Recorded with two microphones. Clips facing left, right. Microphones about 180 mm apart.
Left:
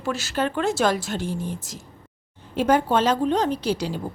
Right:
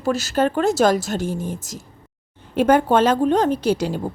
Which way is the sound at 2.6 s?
55° right (ahead or behind).